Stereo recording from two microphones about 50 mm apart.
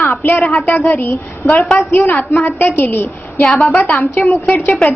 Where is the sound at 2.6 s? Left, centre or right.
Left.